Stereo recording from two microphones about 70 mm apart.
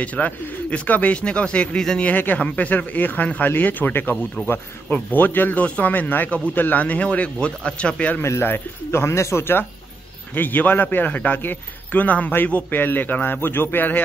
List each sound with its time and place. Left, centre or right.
0.0 s speech: left
2.0 s a man's voice: left
8.2 s a man's voice: left